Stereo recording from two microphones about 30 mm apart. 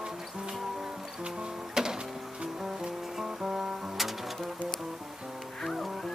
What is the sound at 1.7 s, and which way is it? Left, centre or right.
Music, right.